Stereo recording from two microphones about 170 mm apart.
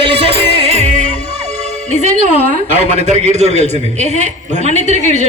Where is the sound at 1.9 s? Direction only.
45° right (ahead or behind).